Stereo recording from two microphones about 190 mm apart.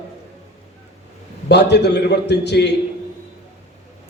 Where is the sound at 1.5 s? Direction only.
60° left (ahead or behind).